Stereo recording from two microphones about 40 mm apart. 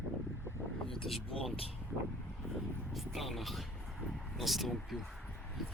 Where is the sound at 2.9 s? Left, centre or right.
Centre.